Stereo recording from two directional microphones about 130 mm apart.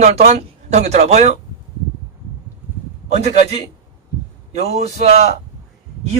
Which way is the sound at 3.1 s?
55° right (ahead or behind).